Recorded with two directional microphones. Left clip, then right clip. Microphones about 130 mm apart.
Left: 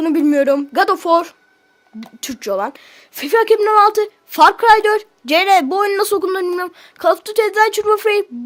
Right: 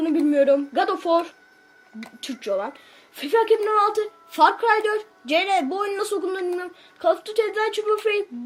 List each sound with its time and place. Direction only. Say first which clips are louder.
0.0 s speech: left 5 dB; 75° left (ahead or behind)